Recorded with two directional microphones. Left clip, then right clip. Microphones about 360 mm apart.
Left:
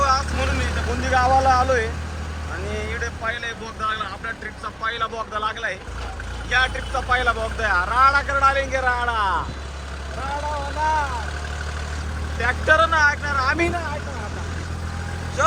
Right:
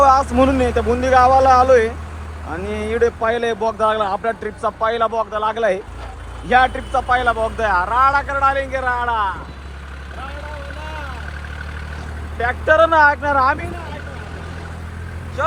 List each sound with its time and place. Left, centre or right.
0.0 s speech: centre
12.4 s speech: centre
15.4 s speech: centre